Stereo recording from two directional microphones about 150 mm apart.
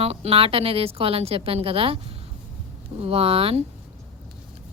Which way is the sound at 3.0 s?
40° right (ahead or behind).